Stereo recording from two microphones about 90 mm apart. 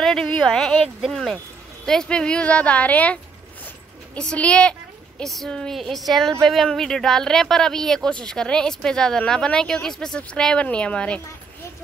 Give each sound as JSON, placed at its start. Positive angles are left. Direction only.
{"t": 0.0, "sound": "a woman's voice", "side_deg": 5}